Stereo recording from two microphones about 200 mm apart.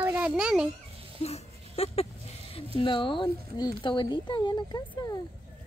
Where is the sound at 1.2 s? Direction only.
30° left (ahead or behind).